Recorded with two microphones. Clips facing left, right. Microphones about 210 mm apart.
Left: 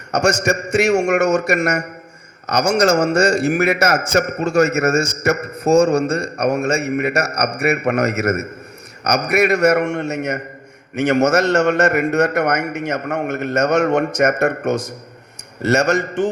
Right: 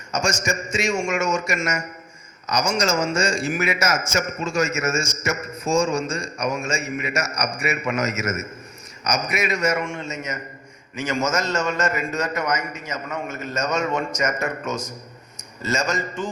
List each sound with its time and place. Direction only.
0.1 s a man's voice: 65° left (ahead or behind)